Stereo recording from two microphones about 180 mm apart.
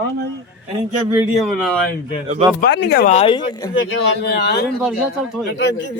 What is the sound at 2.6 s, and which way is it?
Speech, 65° left (ahead or behind).